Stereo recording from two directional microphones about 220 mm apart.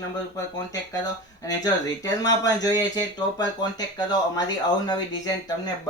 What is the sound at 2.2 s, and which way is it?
Speech, 15° left (ahead or behind).